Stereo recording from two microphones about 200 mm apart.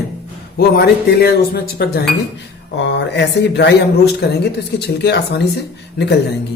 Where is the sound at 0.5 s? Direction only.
50° left (ahead or behind).